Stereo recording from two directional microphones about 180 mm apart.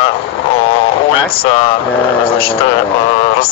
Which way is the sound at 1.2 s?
30° left (ahead or behind).